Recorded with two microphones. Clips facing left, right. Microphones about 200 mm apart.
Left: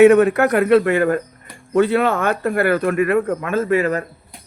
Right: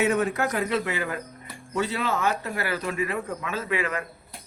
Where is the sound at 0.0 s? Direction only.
65° left (ahead or behind); by 4.0 s 40° left (ahead or behind).